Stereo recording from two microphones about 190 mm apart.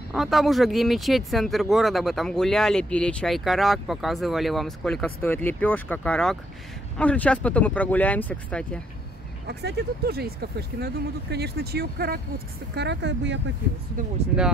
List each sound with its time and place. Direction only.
0.1 s speech: centre (ahead or behind)
9.5 s speech: 60° right (ahead or behind)